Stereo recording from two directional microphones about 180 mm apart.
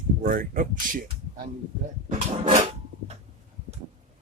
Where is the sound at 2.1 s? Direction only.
40° right (ahead or behind).